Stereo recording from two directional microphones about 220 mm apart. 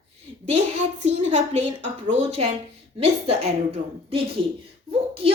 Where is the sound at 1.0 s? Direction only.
30° right (ahead or behind).